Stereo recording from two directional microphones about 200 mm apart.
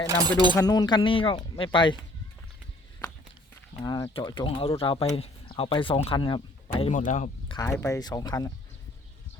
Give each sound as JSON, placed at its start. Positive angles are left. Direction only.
{"t": 0.1, "sound": "speech", "side_deg": -20}
{"t": 0.5, "sound": "speech", "side_deg": 20}
{"t": 3.8, "sound": "speech", "side_deg": 20}
{"t": 6.9, "sound": "speech", "side_deg": 40}
{"t": 7.4, "sound": "a sound", "side_deg": 20}
{"t": 7.8, "sound": "speech", "side_deg": 15}